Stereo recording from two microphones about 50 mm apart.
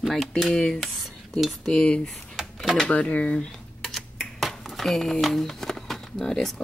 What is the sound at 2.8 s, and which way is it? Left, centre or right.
Speech, left.